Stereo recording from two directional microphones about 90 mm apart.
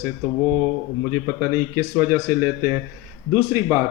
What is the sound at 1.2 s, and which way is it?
Speech, 30° right (ahead or behind).